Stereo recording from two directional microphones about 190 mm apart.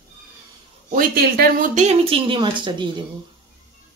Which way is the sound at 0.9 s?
50° right (ahead or behind).